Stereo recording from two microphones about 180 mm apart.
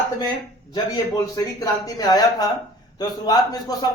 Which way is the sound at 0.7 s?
20° left (ahead or behind).